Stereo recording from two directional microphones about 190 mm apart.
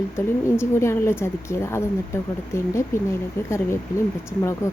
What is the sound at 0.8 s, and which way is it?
Speech, 15° left (ahead or behind).